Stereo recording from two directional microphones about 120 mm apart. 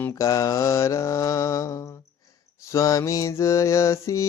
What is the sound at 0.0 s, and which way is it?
Mantra, 25° left (ahead or behind).